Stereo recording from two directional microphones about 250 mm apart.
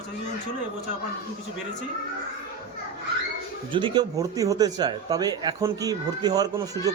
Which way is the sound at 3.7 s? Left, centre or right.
Centre.